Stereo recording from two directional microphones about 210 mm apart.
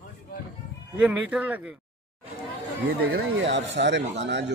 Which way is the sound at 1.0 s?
5° right (ahead or behind).